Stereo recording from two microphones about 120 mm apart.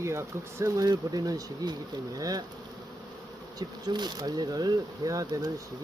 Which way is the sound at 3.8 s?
35° right (ahead or behind).